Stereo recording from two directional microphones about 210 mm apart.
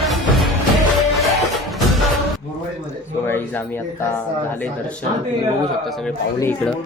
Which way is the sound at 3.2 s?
10° left (ahead or behind).